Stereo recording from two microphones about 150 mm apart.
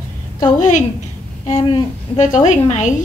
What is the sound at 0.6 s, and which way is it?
Speech, 55° left (ahead or behind).